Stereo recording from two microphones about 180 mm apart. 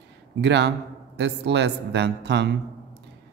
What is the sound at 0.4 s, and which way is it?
A man's voice, 75° right (ahead or behind).